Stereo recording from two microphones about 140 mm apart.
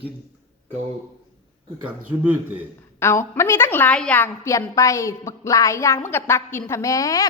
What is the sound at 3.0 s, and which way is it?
A woman's voice, 15° left (ahead or behind).